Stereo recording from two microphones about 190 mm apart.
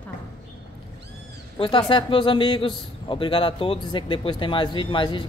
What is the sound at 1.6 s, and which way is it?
A man's voice, 25° left (ahead or behind).